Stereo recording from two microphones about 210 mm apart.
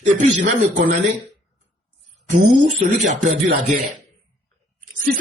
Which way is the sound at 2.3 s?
35° right (ahead or behind).